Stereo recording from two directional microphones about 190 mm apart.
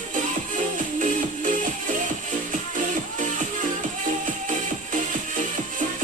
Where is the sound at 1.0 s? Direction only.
40° right (ahead or behind).